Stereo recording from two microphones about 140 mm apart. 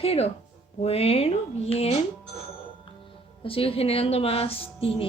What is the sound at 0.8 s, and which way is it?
Speech, 45° left (ahead or behind).